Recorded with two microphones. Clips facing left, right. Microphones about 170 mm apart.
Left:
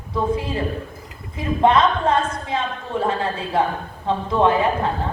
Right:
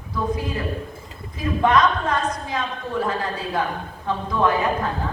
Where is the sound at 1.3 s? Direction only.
30° left (ahead or behind).